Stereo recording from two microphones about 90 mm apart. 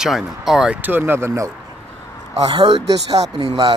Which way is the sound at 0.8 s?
20° right (ahead or behind).